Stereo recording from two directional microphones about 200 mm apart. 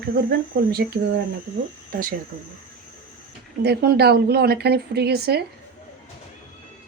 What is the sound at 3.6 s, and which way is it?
A woman's voice, 50° right (ahead or behind).